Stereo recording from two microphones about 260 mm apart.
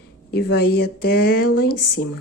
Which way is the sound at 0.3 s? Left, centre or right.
Left.